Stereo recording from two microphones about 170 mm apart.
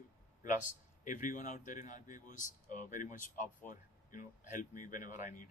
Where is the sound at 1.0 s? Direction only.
50° left (ahead or behind).